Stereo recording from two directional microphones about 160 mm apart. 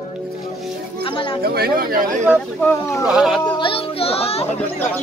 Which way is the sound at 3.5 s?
35° left (ahead or behind).